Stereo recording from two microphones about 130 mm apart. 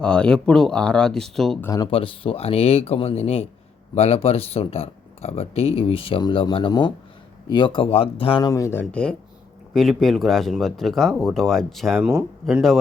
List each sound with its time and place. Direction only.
0.0 s speech: 5° left (ahead or behind)
1.6 s speech: 30° left (ahead or behind)
1.9 s speech: 45° left (ahead or behind)
8.4 s speech: 25° left (ahead or behind); by 11.9 s centre (ahead or behind)
11.9 s speech: 15° right (ahead or behind)
12.5 s speech: centre (ahead or behind)